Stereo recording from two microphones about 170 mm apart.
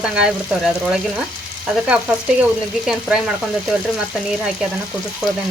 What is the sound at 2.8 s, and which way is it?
Frying, 5° right (ahead or behind).